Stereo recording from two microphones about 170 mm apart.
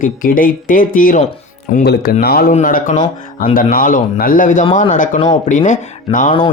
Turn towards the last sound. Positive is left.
turn(degrees=35)  # may be behind; listen again after turning